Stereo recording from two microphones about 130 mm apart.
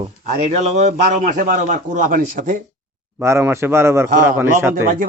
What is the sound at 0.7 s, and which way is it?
A man's voice, 65° right (ahead or behind).